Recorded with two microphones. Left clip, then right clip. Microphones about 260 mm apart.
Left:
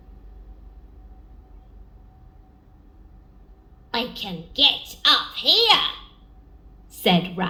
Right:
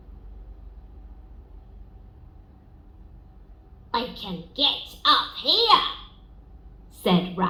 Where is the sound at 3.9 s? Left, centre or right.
Left.